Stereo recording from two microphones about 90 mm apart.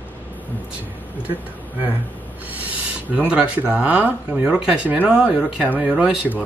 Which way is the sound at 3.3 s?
15° right (ahead or behind).